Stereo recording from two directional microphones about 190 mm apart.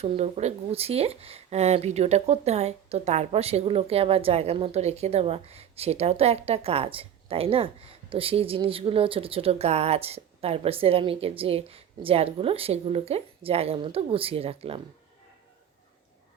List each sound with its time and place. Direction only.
0.0 s speech: 35° right (ahead or behind)